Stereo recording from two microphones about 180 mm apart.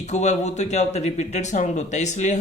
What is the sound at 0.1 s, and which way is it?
Speech, 40° left (ahead or behind).